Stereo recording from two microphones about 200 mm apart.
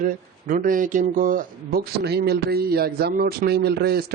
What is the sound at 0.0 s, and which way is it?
Speech, 45° right (ahead or behind).